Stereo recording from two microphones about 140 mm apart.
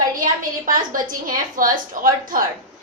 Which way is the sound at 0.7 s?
75° right (ahead or behind).